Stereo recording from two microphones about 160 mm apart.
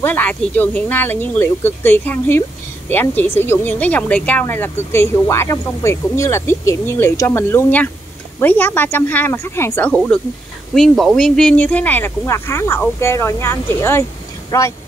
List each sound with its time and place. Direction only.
0.0 s speech: 10° left (ahead or behind)